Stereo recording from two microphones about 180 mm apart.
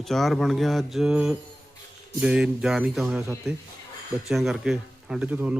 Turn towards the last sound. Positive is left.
turn(degrees=-10)  # may be behind; listen again after turning